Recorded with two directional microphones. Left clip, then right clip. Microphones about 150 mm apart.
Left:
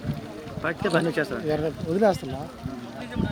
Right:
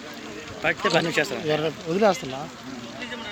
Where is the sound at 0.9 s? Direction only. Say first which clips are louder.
Right 1 dB; 50° left (ahead or behind).